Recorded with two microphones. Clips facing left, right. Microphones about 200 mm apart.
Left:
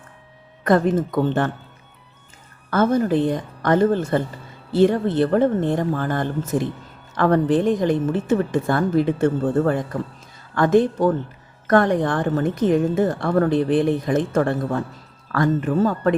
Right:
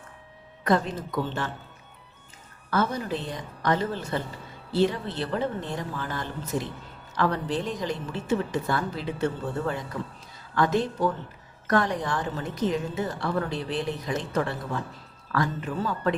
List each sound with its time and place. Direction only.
0.6 s a woman's voice: 50° left (ahead or behind)
2.6 s a woman's voice: 50° left (ahead or behind)